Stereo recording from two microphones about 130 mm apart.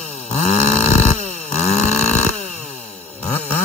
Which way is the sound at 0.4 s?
60° left (ahead or behind).